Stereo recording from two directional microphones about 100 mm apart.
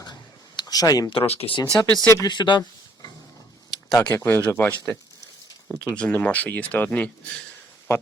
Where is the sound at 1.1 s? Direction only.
70° left (ahead or behind).